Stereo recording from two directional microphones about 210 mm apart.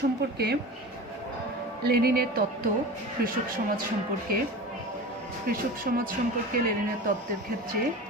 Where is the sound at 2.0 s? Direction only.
45° right (ahead or behind).